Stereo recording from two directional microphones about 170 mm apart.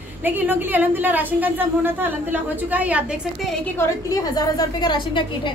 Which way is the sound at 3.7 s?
20° left (ahead or behind).